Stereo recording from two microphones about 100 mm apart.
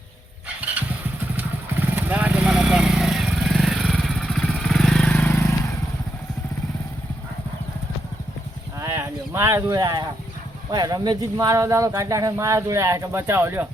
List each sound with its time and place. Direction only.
0.4 s vehicle: 15° right (ahead or behind); by 5.5 s 20° left (ahead or behind)
8.8 s a sound: 25° right (ahead or behind)
10.7 s speech: 40° right (ahead or behind); by 13.7 s 25° right (ahead or behind)